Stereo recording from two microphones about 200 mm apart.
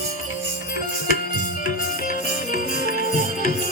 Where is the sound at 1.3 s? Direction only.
45° left (ahead or behind).